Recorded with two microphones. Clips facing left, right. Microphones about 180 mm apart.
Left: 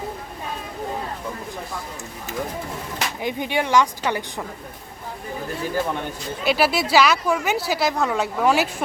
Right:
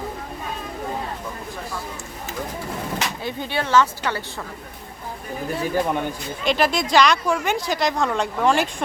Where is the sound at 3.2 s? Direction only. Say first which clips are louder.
Left 3 dB; 15° left (ahead or behind).